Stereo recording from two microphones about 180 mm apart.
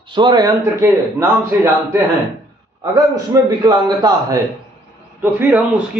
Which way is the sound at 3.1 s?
20° right (ahead or behind).